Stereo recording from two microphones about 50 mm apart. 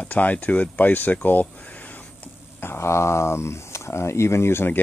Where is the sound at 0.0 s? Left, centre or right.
Left.